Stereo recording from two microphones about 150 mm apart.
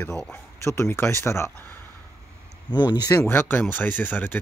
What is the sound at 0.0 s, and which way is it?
Speech, 5° left (ahead or behind).